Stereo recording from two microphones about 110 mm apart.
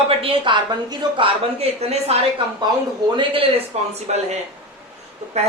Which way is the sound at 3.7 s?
80° right.